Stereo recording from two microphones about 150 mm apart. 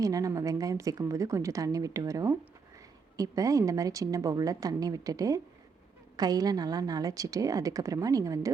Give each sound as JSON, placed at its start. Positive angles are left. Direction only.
{"t": 0.0, "sound": "a woman's voice", "side_deg": -25}